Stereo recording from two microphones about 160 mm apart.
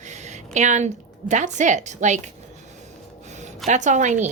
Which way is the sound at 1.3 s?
50° right (ahead or behind).